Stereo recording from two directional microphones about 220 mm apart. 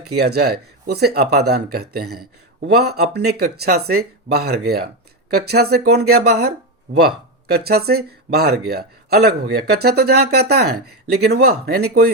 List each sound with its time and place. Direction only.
0.2 s speech: 45° right (ahead or behind)
7.5 s speech: 45° right (ahead or behind)